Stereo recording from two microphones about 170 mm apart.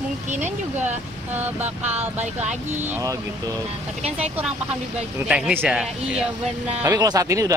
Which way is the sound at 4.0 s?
40° right (ahead or behind).